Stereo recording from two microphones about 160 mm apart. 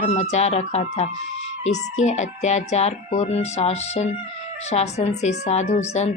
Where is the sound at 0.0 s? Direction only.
45° left (ahead or behind).